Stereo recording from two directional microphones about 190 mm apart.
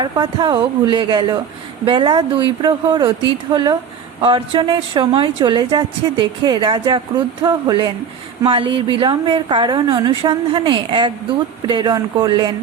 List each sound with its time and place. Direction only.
0.0 s a woman's voice: 25° right (ahead or behind)